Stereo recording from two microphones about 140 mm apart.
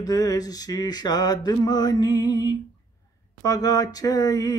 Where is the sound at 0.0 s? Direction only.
25° left (ahead or behind).